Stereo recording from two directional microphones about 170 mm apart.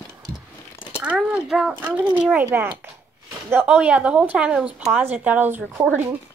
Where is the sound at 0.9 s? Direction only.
10° right (ahead or behind).